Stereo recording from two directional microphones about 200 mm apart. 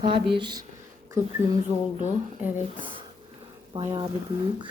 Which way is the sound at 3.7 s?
25° right (ahead or behind).